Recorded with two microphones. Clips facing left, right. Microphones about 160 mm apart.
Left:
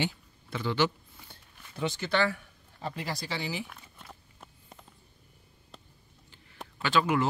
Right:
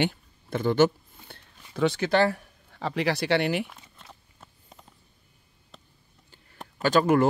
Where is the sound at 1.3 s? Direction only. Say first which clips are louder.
Right 9 dB; 70° right (ahead or behind).